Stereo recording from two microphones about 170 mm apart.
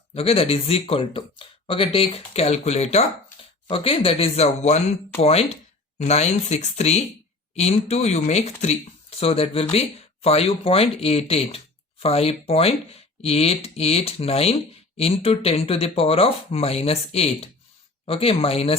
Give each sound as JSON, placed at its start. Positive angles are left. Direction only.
{"t": 0.1, "sound": "speech", "side_deg": 35}